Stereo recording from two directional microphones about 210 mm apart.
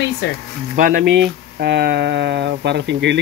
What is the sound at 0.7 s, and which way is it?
Speech, 40° right (ahead or behind).